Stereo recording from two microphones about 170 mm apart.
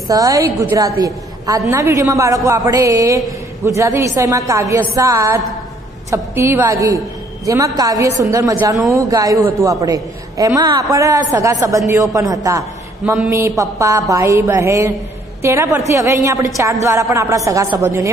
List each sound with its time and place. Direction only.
0.1 s a woman's voice: 20° right (ahead or behind)